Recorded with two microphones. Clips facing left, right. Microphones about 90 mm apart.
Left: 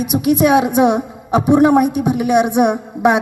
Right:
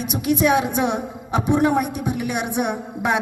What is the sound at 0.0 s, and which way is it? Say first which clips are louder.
A woman's voice: left 6 dB; 10° left (ahead or behind).